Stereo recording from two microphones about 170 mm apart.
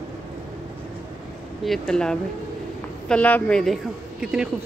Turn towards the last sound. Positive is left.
turn(degrees=-5)  # may be behind; listen again after turning